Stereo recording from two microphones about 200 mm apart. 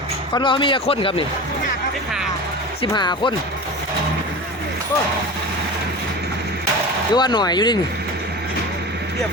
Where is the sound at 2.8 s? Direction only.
20° left (ahead or behind).